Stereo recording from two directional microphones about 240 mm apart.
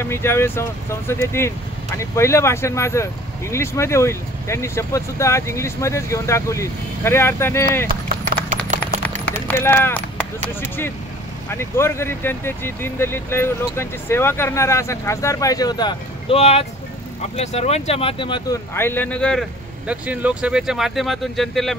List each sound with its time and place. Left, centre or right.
0.0 s speech: centre
7.9 s clip-clop: right
8.5 s a sound: right
9.5 s speech: centre
11.5 s speech: centre